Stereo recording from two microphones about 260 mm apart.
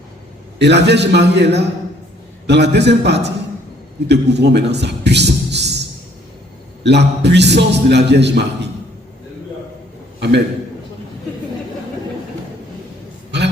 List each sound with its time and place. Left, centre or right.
0.6 s a man's voice: right
6.8 s a man's voice: right
13.3 s a sound: right